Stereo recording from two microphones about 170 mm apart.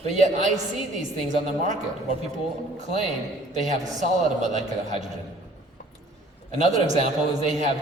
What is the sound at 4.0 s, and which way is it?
A man's voice, 45° right (ahead or behind).